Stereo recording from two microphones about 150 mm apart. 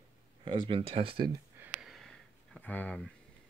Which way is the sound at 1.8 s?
Centre (ahead or behind).